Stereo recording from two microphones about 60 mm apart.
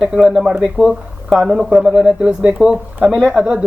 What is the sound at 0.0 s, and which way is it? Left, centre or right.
Speech, centre.